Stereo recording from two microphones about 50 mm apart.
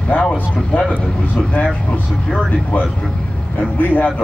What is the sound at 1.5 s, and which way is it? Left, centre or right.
Speech, left.